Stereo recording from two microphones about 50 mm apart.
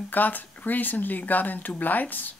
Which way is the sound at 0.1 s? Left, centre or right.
Left.